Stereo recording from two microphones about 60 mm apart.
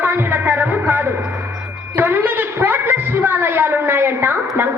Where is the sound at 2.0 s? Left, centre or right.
Right.